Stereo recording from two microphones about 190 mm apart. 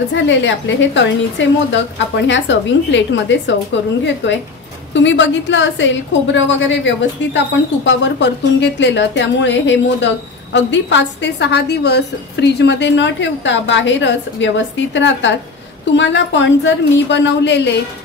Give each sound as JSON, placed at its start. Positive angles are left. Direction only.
{"t": 0.1, "sound": "a woman's voice", "side_deg": 75}